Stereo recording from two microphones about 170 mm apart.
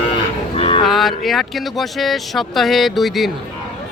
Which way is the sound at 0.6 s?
35° left (ahead or behind).